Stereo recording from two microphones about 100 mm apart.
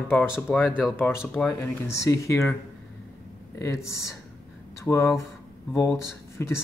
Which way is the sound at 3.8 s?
30° left (ahead or behind).